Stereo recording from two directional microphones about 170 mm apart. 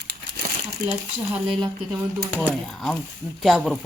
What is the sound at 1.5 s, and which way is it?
Speech, 25° right (ahead or behind).